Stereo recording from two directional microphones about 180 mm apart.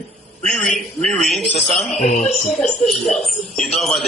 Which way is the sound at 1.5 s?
40° left (ahead or behind).